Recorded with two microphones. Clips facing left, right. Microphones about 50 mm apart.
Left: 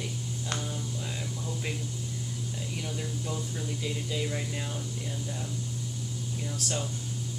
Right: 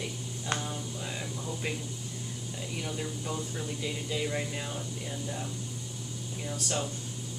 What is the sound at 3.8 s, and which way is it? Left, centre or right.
Speech, centre.